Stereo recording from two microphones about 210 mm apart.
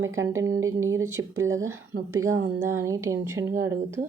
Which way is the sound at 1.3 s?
75° right (ahead or behind).